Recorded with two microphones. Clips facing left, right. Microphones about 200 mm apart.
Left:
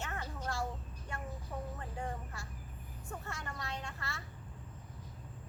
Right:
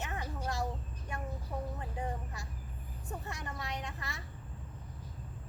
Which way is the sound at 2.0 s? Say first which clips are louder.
Right 2 dB; 20° right (ahead or behind).